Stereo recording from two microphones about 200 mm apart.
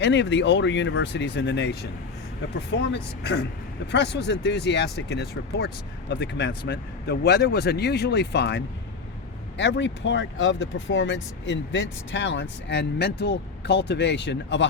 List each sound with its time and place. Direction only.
0.0 s speech: 65° left (ahead or behind)